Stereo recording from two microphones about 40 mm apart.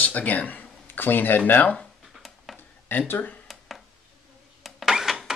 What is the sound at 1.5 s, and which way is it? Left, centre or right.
Speech, left.